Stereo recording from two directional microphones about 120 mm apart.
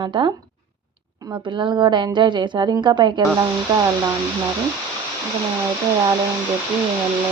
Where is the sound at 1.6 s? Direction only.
40° right (ahead or behind).